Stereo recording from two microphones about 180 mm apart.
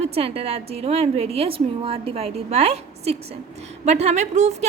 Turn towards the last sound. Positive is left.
turn(degrees=-40)  # may be behind; listen again after turning